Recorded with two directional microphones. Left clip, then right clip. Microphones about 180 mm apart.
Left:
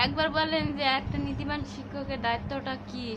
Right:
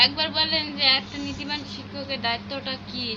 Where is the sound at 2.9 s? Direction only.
60° left (ahead or behind).